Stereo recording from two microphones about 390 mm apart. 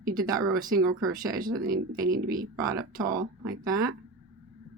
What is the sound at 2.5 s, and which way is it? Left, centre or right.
Speech, centre.